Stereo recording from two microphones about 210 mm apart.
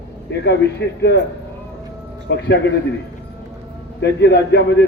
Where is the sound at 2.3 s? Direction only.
55° left (ahead or behind).